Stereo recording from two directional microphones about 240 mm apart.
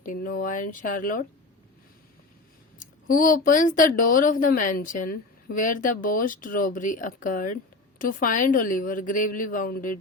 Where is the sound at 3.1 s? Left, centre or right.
Left.